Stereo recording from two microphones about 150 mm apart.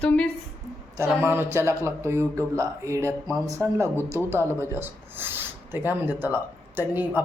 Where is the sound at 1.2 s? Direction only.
15° right (ahead or behind).